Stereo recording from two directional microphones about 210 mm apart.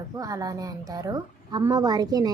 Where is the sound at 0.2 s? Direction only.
15° right (ahead or behind).